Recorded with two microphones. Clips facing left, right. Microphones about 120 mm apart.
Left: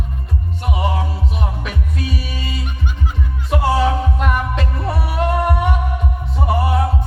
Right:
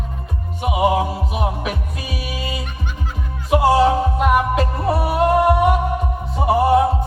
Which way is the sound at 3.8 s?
35° right (ahead or behind).